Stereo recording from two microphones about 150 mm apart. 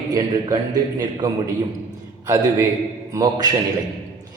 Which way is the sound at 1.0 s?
25° right (ahead or behind).